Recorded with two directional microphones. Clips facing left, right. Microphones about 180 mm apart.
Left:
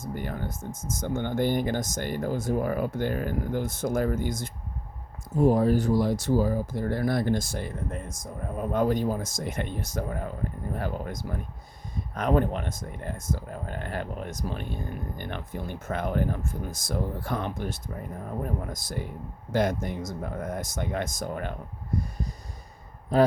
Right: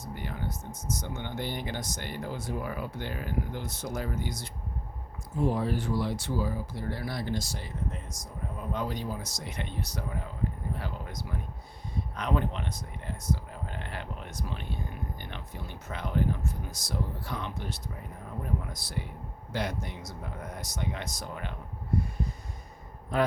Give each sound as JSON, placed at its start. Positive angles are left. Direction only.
{"t": 0.0, "sound": "speech", "side_deg": 45}
{"t": 23.1, "sound": "a man's voice", "side_deg": 35}